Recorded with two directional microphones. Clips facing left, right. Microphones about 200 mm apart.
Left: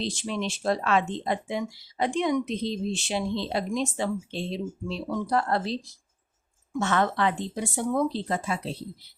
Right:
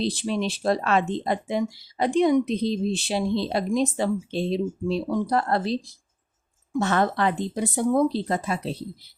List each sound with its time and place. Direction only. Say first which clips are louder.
0.0 s speech: right 5 dB; 35° right (ahead or behind)